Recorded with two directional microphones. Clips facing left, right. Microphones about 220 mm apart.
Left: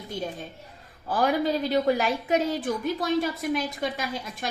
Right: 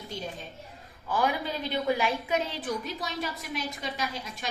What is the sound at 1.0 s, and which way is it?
Speech, 40° left (ahead or behind).